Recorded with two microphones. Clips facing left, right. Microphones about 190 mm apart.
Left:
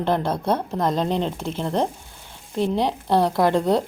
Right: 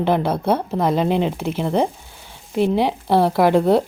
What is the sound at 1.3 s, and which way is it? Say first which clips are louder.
Speech: right 4 dB; 60° right (ahead or behind).